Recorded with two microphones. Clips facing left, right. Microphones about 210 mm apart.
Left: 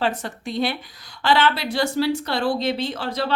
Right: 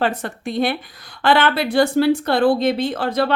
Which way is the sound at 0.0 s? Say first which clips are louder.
Right 3 dB; 55° right (ahead or behind).